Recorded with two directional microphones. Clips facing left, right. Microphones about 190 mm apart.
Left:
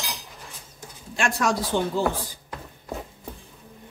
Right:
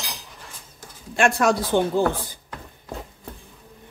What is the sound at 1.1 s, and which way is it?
Speech, 55° right (ahead or behind).